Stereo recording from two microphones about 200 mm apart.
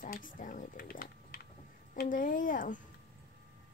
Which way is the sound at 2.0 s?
45° left (ahead or behind).